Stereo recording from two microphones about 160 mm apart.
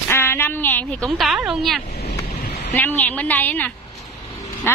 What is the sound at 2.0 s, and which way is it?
Vehicle, 90° left.